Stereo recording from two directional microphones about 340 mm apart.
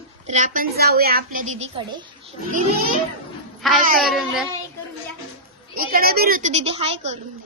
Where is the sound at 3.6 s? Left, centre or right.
Centre.